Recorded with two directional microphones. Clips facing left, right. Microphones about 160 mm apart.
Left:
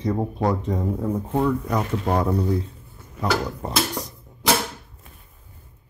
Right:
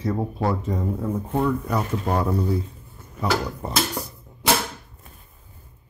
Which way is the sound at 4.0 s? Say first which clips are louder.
Even; 10° right (ahead or behind).